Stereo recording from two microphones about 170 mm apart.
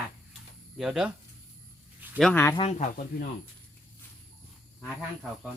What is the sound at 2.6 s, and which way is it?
Speech, 40° left (ahead or behind).